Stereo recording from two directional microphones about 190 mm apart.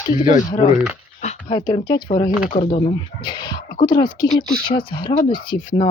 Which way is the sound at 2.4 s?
35° left (ahead or behind).